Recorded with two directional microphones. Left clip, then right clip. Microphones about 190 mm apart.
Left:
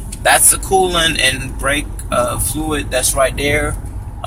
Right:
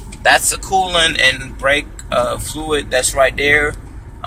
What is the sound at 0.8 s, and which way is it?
Speech, 10° right (ahead or behind).